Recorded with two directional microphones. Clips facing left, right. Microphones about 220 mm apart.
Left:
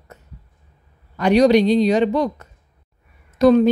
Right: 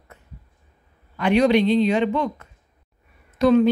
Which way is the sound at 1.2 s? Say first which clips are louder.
Left 4 dB; 40° left (ahead or behind).